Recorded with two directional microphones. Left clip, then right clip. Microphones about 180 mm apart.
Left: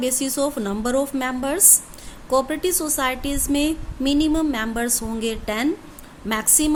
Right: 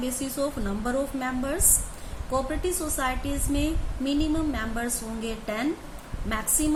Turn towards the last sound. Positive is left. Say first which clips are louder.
# left 6 dB
turn(degrees=65)  # may be behind; listen again after turning